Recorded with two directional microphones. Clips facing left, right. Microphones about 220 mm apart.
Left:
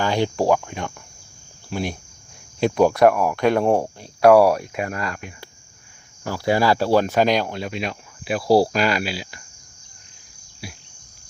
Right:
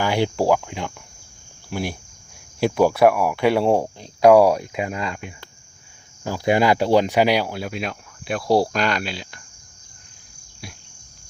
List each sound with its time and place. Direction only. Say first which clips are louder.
0.0 s speech: even; 10° right (ahead or behind)
10.6 s speech: left 2 dB; centre (ahead or behind)